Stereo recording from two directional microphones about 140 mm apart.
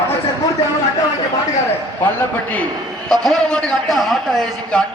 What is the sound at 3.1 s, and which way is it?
A man's voice, 5° left (ahead or behind).